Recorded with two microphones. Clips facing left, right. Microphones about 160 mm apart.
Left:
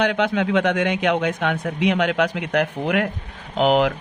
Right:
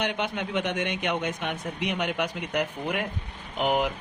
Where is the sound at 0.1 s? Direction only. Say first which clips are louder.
Left 9 dB; 90° left.